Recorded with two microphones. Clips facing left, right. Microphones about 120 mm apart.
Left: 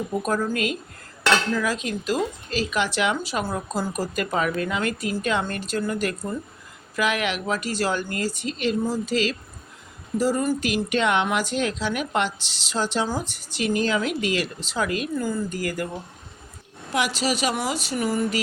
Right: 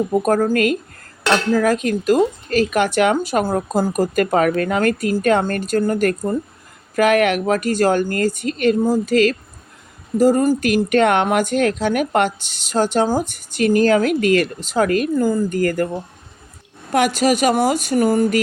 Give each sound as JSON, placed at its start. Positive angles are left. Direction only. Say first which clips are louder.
{"t": 0.1, "sound": "speech", "louder": "right 6 dB", "side_deg": -50}
{"t": 16.9, "sound": "speech", "louder": "right 8 dB", "side_deg": -50}